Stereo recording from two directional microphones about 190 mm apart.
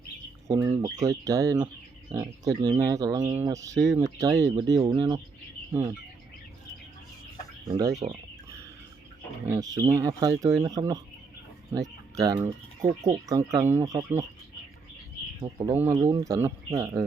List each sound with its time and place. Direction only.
0.4 s speech: 15° right (ahead or behind)
7.7 s speech: 20° right (ahead or behind)
9.5 s speech: 15° right (ahead or behind)
15.4 s speech: 25° right (ahead or behind)
15.7 s speech: 10° right (ahead or behind)